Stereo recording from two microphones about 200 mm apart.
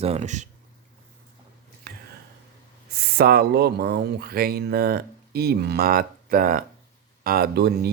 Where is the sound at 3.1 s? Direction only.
50° right (ahead or behind).